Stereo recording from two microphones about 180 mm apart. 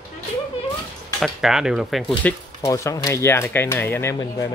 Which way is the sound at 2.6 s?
15° left (ahead or behind).